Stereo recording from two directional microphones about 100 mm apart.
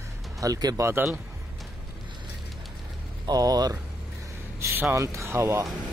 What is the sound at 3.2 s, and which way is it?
Speech, 40° right (ahead or behind).